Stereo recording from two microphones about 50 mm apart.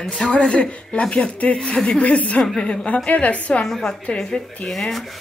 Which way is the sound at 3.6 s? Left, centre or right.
Centre.